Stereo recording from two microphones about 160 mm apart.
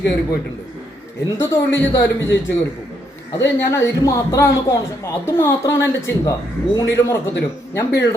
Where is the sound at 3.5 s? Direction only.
15° left (ahead or behind).